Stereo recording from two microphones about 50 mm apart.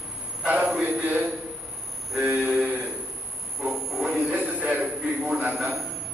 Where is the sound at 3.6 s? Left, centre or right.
Centre.